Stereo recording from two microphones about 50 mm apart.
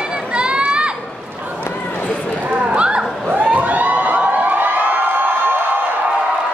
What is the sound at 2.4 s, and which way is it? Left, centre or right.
Crowd, right.